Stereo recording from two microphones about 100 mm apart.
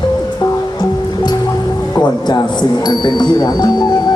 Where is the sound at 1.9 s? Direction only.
45° left (ahead or behind).